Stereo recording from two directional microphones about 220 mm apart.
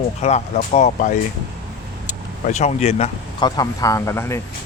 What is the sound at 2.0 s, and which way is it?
Vehicle, 35° left (ahead or behind).